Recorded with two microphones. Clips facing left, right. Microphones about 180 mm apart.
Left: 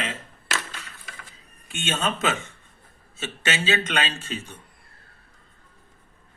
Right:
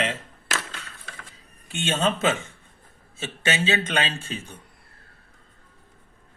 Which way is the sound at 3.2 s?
20° right (ahead or behind).